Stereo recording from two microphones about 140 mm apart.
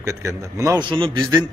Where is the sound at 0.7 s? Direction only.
35° right (ahead or behind).